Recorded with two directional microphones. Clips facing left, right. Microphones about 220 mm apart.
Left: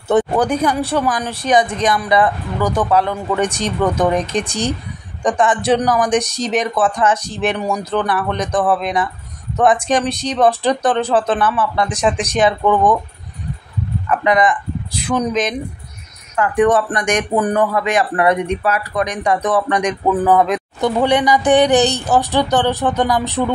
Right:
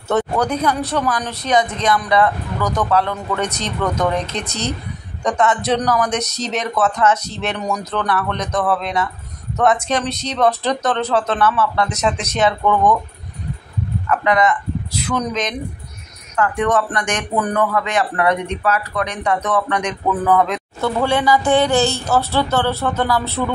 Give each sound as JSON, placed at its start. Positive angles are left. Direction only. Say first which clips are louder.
{"t": 0.1, "sound": "speech", "louder": "left 3 dB", "side_deg": 15}
{"t": 5.4, "sound": "speech", "louder": "left 2 dB", "side_deg": 10}
{"t": 14.0, "sound": "speech", "louder": "left 2 dB", "side_deg": 15}